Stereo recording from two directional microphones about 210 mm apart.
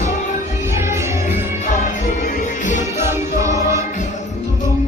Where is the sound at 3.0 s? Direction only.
15° right (ahead or behind).